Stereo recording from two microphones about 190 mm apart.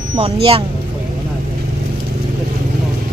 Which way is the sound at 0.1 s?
30° right (ahead or behind).